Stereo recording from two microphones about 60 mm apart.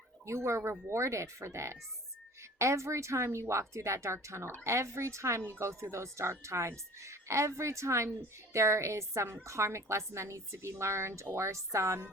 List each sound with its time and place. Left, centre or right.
0.3 s a woman's voice: right